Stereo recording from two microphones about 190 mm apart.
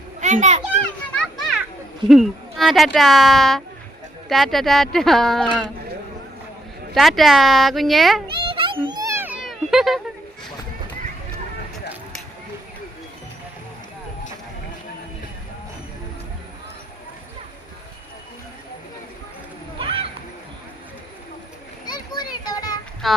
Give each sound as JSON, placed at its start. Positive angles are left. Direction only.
{"t": 0.2, "sound": "a child's voice", "side_deg": -40}
{"t": 1.1, "sound": "children playing", "side_deg": 0}
{"t": 2.0, "sound": "speech", "side_deg": 0}
{"t": 6.9, "sound": "speech", "side_deg": 0}
{"t": 8.3, "sound": "cat", "side_deg": -25}
{"t": 19.8, "sound": "a sound", "side_deg": -30}
{"t": 21.8, "sound": "children playing", "side_deg": 20}
{"t": 23.0, "sound": "speech", "side_deg": 0}